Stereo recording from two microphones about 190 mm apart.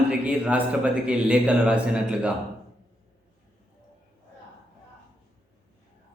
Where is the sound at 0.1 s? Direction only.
5° right (ahead or behind).